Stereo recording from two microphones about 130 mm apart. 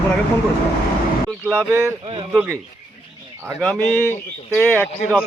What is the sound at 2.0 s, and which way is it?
Speech, 45° right (ahead or behind).